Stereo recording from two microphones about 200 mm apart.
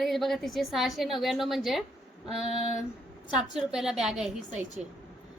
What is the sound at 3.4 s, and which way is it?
A woman's voice, centre (ahead or behind).